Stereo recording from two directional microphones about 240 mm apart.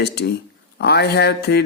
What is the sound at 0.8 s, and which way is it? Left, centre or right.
Speech, left.